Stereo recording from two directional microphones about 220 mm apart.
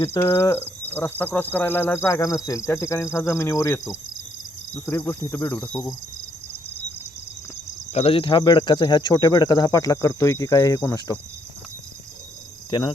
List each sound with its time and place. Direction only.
0.0 s speech: 15° left (ahead or behind)
7.9 s speech: 25° left (ahead or behind)